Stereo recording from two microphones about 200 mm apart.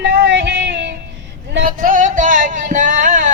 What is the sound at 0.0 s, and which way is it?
Music, 65° right (ahead or behind).